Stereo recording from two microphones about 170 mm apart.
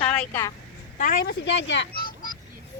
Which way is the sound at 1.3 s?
90° left.